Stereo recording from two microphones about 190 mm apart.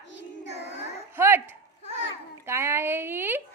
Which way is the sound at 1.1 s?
10° right (ahead or behind).